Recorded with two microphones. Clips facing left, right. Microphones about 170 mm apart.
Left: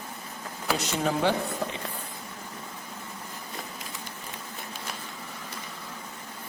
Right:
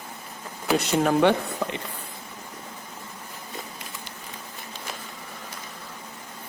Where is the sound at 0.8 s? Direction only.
60° right (ahead or behind).